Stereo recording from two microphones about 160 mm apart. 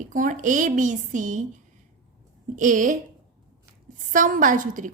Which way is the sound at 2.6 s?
55° right (ahead or behind).